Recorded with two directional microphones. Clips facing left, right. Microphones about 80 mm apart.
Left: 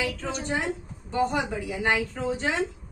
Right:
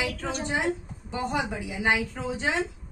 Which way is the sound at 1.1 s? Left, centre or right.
Centre.